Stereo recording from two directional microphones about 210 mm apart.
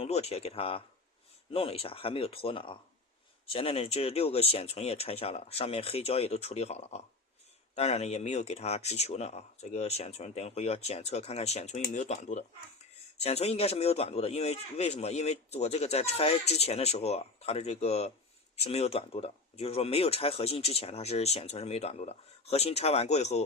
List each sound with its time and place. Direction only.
0.0 s speech: 30° left (ahead or behind)